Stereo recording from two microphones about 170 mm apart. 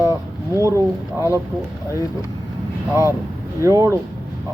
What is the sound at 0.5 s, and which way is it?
Speech, 15° right (ahead or behind).